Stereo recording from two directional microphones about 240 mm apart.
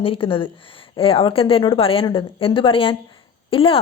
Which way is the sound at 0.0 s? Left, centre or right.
Left.